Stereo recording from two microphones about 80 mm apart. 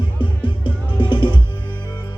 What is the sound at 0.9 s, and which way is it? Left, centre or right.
Music, left.